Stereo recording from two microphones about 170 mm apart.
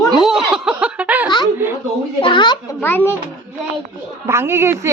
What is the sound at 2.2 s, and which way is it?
Speech, 30° left (ahead or behind).